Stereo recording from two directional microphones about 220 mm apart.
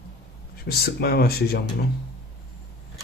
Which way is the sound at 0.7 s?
45° left (ahead or behind).